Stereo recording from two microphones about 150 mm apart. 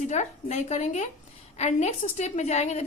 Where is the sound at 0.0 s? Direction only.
50° left (ahead or behind).